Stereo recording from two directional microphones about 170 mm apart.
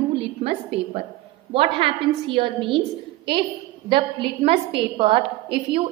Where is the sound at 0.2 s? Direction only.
35° right (ahead or behind).